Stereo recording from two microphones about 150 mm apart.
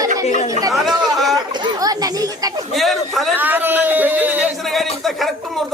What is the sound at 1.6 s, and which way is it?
Children playing, 25° right (ahead or behind).